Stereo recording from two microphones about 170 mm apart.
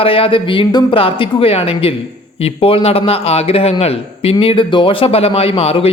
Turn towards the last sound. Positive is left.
turn(degrees=35)  # may be behind; listen again after turning